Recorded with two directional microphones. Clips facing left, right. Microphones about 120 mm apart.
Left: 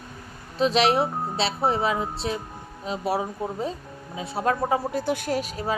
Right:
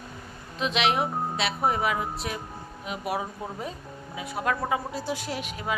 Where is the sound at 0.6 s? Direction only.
35° left (ahead or behind).